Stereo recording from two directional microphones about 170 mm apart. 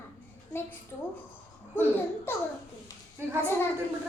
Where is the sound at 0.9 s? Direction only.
15° left (ahead or behind).